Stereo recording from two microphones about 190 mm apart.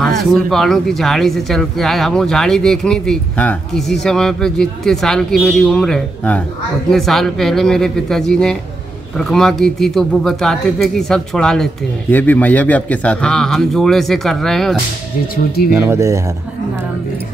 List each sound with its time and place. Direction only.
0.0 s speech: centre (ahead or behind)
15.9 s speech: 15° right (ahead or behind)